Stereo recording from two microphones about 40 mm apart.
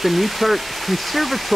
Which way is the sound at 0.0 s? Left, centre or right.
Centre.